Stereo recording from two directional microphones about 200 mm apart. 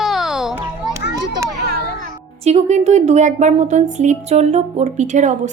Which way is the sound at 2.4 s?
35° right (ahead or behind).